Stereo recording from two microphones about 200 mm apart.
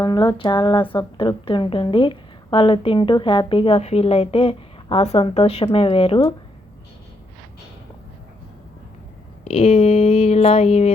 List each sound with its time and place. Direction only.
0.0 s a woman's voice: 20° left (ahead or behind)
9.4 s speech: 30° left (ahead or behind)